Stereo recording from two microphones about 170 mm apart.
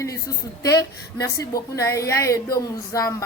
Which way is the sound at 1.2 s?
20° left (ahead or behind).